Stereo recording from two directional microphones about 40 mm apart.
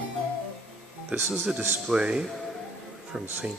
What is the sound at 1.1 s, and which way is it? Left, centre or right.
Speech, right.